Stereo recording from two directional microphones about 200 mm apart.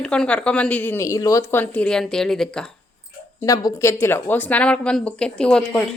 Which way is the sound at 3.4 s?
15° left (ahead or behind).